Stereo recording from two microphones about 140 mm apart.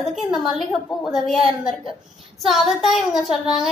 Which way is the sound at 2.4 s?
Centre (ahead or behind).